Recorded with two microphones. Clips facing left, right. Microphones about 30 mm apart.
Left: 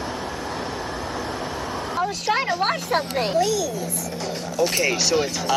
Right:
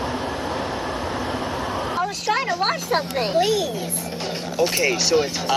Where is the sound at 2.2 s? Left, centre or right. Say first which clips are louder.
Even; centre.